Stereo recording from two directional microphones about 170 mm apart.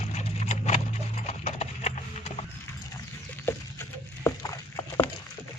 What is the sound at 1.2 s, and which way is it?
Clip-clop, 40° left (ahead or behind).